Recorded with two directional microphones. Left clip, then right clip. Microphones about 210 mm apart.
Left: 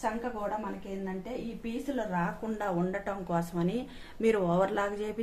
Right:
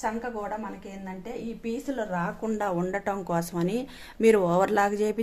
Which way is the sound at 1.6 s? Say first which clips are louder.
Right 4 dB; 40° right (ahead or behind).